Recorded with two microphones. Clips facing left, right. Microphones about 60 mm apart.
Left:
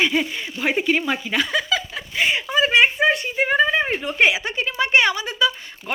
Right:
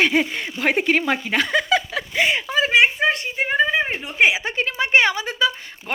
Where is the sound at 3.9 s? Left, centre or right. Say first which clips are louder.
Even; centre.